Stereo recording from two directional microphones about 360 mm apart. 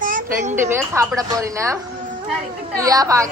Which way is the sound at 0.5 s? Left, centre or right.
Centre.